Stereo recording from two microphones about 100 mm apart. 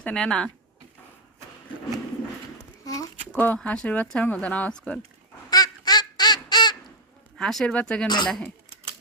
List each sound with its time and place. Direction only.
0.0 s speech: 10° left (ahead or behind)
2.8 s a sound: 35° left (ahead or behind)
3.3 s speech: 15° left (ahead or behind)
5.5 s duck: 40° left (ahead or behind)
7.3 s speech: 5° left (ahead or behind)
8.0 s speech: 45° left (ahead or behind)
8.3 s speech: 10° left (ahead or behind)